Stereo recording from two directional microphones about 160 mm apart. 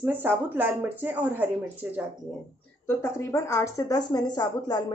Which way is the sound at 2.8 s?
15° left (ahead or behind).